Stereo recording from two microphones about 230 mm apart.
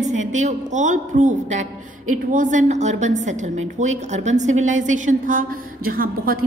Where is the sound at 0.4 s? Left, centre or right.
Right.